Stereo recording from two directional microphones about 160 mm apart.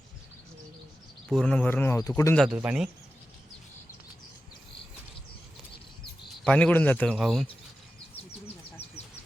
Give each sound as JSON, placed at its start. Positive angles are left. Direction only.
{"t": 1.3, "sound": "speech", "side_deg": 5}
{"t": 2.3, "sound": "speech", "side_deg": 0}
{"t": 6.4, "sound": "speech", "side_deg": 5}